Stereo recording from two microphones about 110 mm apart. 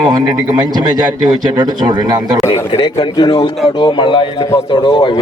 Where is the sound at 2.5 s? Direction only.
50° left (ahead or behind).